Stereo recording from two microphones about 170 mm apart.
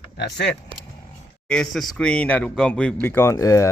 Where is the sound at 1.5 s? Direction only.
5° left (ahead or behind).